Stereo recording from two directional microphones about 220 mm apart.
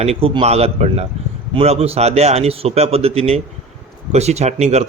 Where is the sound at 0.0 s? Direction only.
25° right (ahead or behind).